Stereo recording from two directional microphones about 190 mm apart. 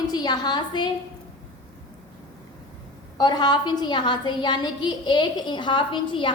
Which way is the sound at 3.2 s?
20° left (ahead or behind).